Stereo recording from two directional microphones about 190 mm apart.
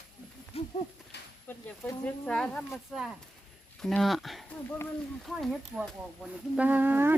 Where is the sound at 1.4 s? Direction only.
10° left (ahead or behind).